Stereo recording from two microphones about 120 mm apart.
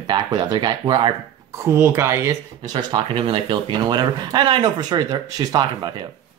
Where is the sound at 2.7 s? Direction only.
45° right (ahead or behind).